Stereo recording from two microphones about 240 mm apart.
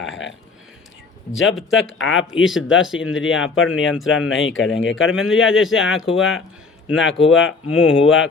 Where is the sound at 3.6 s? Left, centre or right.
Left.